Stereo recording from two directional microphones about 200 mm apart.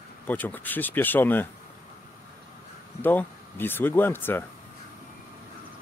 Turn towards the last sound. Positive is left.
turn(degrees=10)  # may be behind; listen again after turning